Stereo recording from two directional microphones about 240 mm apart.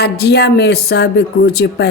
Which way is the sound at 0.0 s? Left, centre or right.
Left.